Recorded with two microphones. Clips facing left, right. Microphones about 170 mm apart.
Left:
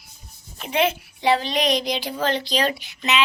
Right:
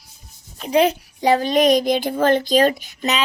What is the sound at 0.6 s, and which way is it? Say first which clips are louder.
Speech: right 5 dB; 35° right (ahead or behind).